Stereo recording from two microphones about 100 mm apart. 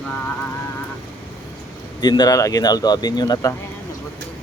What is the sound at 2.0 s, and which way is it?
Speech, 45° left (ahead or behind).